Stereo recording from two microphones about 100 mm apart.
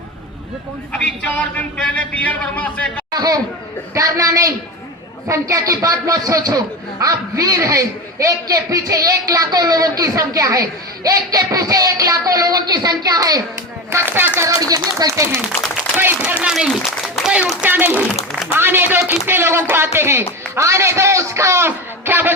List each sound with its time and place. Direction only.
0.9 s a man's voice: 15° left (ahead or behind)
3.1 s a man's voice: 40° right (ahead or behind)
13.9 s a man's voice: 20° right (ahead or behind)
14.6 s a man's voice: 40° right (ahead or behind)
15.4 s a man's voice: 20° right (ahead or behind)